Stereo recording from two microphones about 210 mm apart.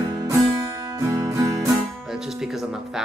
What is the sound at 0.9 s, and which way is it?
Music, 15° right (ahead or behind).